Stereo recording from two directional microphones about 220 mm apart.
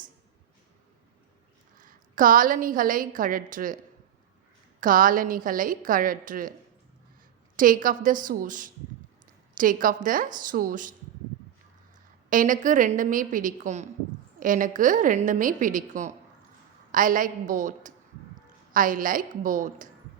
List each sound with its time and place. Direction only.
1.8 s a woman's voice: 40° right (ahead or behind)
4.8 s a woman's voice: 40° right (ahead or behind)
7.5 s a woman's voice: 40° right (ahead or behind)
12.3 s a woman's voice: 35° right (ahead or behind)